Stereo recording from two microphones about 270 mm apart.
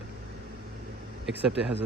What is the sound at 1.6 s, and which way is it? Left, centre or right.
Speech, right.